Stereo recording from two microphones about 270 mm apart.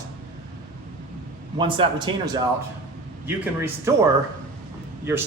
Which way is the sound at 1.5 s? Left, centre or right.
Centre.